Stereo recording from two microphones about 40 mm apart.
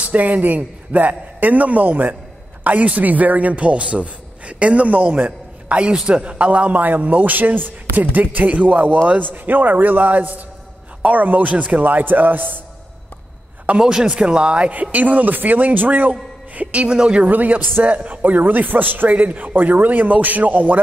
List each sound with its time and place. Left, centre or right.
0.0 s a man's voice: right
7.0 s a man's voice: right
7.2 s speech: right
13.7 s speech: centre
14.7 s a man's voice: right
16.9 s speech: right
17.2 s speech: right
17.8 s a man's voice: right
18.2 s speech: right